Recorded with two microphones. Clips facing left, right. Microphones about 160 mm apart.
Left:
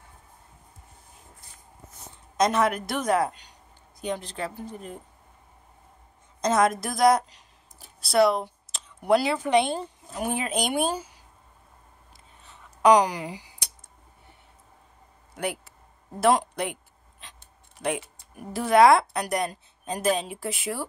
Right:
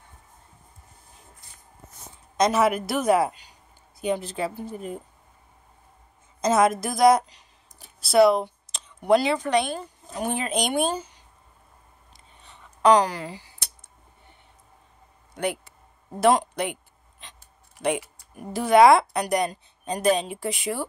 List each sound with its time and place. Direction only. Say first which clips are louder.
2.3 s a woman's voice: right 2 dB; centre (ahead or behind)
6.4 s a woman's voice: right 2 dB; 5° right (ahead or behind)
9.5 s speech: left 2 dB; 25° left (ahead or behind)
10.1 s speech: right 1 dB; 5° left (ahead or behind)
12.1 s whispering: right 1 dB; 5° left (ahead or behind)
12.8 s speech: even; 15° left (ahead or behind)
15.3 s a woman's voice: right 3 dB; 5° left (ahead or behind)
18.3 s a woman's voice: right 2 dB; centre (ahead or behind)